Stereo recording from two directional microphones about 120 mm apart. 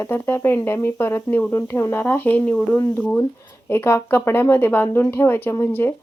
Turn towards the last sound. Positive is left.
turn(degrees=20)  # may be behind; listen again after turning